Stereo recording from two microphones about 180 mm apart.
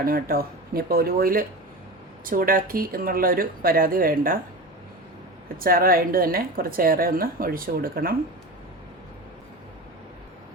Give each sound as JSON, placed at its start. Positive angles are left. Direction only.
{"t": 0.0, "sound": "a woman's voice", "side_deg": -55}
{"t": 5.5, "sound": "a woman's voice", "side_deg": -55}